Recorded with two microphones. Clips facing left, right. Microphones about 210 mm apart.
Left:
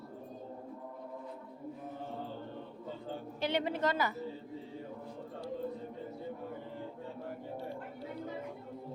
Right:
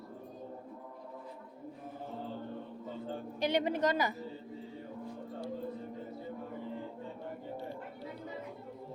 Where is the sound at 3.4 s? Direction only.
15° right (ahead or behind).